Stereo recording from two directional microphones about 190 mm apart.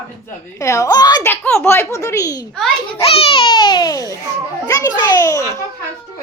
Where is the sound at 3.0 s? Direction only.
30° left (ahead or behind).